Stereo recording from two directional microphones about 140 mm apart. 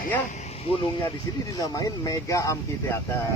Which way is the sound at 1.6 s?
25° left (ahead or behind).